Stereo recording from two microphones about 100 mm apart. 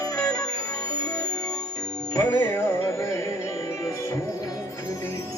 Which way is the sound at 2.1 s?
25° left (ahead or behind).